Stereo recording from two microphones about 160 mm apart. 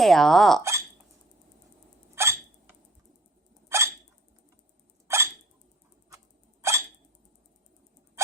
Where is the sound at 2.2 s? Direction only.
15° right (ahead or behind).